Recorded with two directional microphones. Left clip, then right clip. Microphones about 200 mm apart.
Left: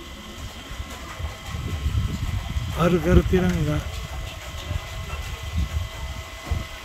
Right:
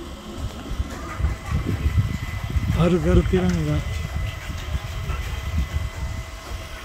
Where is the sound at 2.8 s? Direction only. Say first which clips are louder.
Even; 5° right (ahead or behind).